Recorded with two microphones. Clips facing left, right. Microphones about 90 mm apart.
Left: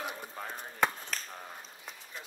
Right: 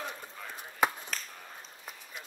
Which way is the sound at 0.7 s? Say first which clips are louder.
Right 1 dB; 5° right (ahead or behind).